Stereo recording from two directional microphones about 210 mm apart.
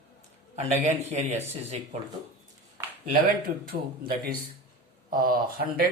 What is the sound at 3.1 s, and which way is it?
Speech, 45° right (ahead or behind).